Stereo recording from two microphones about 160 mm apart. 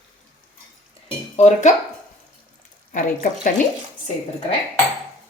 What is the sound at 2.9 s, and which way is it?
Speech, 55° left (ahead or behind).